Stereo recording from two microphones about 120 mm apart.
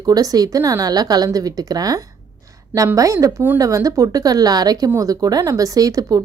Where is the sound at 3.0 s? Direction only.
30° right (ahead or behind).